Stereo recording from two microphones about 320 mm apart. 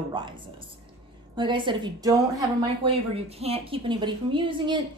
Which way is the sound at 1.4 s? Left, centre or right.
Centre.